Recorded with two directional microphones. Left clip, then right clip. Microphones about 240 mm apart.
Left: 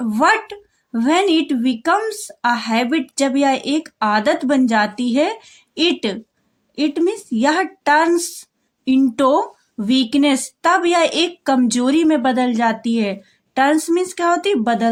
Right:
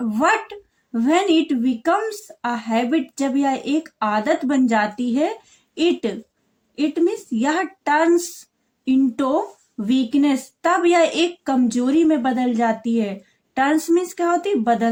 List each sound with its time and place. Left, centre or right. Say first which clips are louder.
0.0 s a woman's voice: left 3 dB; left